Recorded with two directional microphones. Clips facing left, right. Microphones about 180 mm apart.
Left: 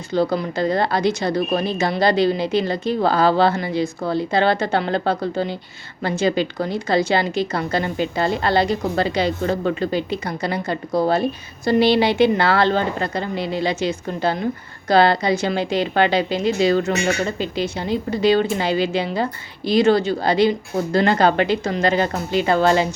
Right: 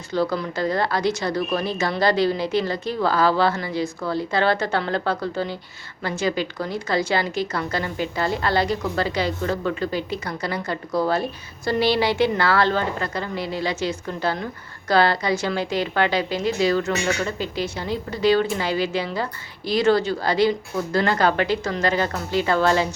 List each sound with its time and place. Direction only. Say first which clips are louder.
0.1 s a woman's voice: left 3 dB; 20° left (ahead or behind)